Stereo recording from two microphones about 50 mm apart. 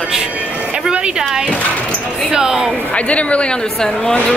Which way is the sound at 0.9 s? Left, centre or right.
Centre.